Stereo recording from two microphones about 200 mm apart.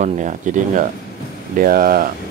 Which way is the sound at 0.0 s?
40° right (ahead or behind).